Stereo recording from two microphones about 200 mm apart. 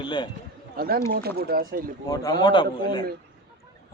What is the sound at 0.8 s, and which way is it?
Speech, 50° right (ahead or behind).